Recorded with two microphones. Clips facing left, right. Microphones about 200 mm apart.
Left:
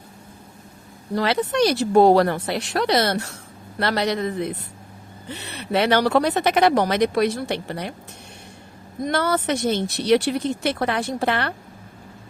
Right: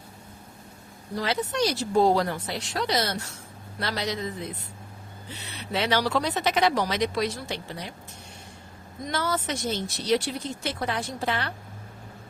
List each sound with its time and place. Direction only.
1.1 s speech: 70° left (ahead or behind)
9.0 s speech: 60° left (ahead or behind)